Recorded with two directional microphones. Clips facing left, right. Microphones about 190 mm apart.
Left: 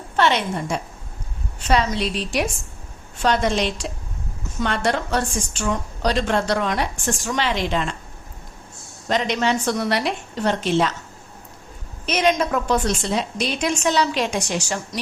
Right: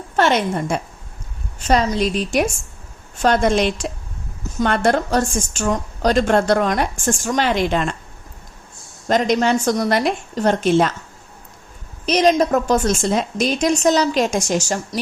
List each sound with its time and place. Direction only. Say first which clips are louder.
0.2 s a woman's voice: right 3 dB; 50° right (ahead or behind)
9.0 s a woman's voice: right 4 dB; 45° right (ahead or behind)
12.0 s a woman's voice: right 5 dB; 35° right (ahead or behind)